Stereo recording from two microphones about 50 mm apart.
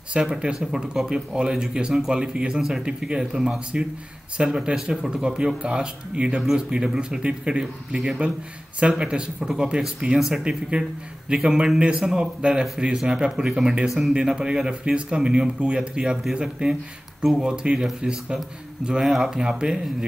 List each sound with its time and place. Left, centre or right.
0.1 s speech: centre
18.9 s speech: centre